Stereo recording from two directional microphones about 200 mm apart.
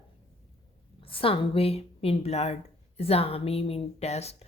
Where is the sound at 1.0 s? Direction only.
25° left (ahead or behind).